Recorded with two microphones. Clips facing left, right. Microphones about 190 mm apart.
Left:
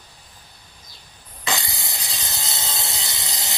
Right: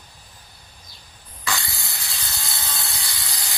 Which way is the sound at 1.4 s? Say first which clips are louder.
Left 2 dB; 20° left (ahead or behind).